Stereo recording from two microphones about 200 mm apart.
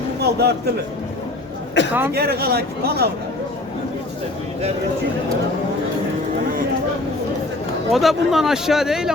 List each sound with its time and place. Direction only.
0.2 s a man's voice: 55° right (ahead or behind)
1.9 s speech: 10° right (ahead or behind)
2.1 s speech: 50° right (ahead or behind)
7.9 s speech: centre (ahead or behind)